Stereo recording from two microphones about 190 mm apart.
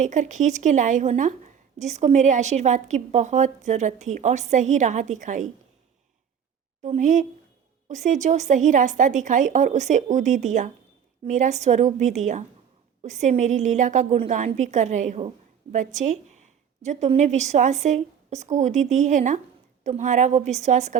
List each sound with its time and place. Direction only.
0.0 s a woman's voice: 40° right (ahead or behind)
6.8 s a woman's voice: 40° right (ahead or behind)